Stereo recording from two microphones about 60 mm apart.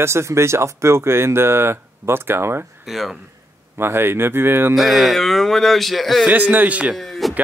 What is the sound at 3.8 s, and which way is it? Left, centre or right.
Speech, right.